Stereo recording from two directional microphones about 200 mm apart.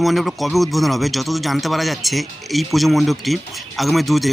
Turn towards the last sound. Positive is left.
turn(degrees=0)  # may be behind; listen again after turning